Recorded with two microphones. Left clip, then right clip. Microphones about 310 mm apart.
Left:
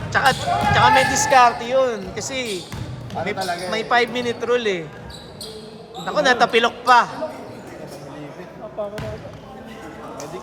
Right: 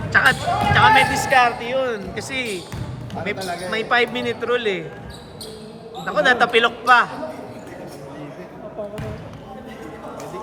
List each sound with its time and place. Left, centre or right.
0.1 s speech: centre
3.2 s speech: left
3.7 s speech: centre
6.1 s speech: centre